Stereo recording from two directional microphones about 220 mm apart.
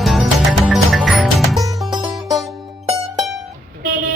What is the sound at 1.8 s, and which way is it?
Music, centre (ahead or behind).